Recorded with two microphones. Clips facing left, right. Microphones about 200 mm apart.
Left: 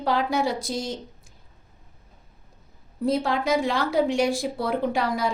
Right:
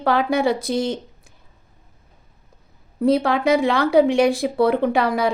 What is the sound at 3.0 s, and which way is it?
Speech, 65° right (ahead or behind).